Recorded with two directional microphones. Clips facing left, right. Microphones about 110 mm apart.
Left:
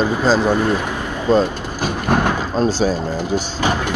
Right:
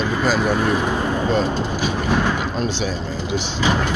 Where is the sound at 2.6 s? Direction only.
40° left (ahead or behind).